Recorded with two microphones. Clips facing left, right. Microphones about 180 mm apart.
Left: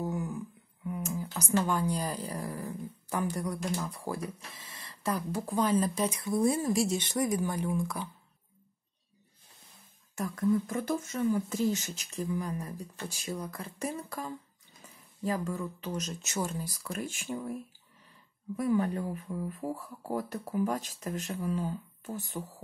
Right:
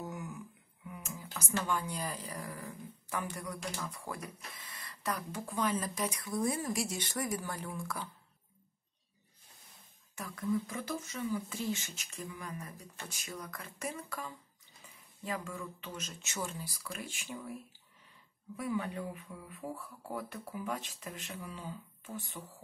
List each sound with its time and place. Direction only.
0.0 s a sound: 35° left (ahead or behind)
0.8 s speech: 40° left (ahead or behind); by 8.1 s 20° left (ahead or behind)
10.1 s speech: 45° left (ahead or behind)
18.6 s speech: 40° left (ahead or behind)